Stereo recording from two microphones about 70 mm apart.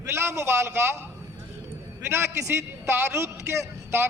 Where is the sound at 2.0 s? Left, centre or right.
Right.